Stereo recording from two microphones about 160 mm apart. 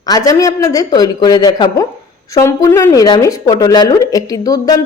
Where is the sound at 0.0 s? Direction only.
20° left (ahead or behind).